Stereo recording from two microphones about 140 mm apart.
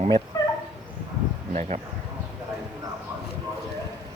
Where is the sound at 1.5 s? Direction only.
55° right (ahead or behind).